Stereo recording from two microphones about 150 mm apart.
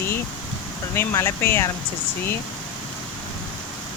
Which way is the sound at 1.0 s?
15° left (ahead or behind).